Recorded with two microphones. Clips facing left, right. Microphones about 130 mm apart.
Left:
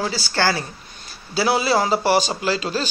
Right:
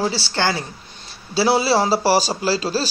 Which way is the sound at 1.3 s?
30° right (ahead or behind).